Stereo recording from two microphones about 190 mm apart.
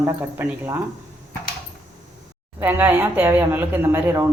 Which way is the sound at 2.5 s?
10° right (ahead or behind).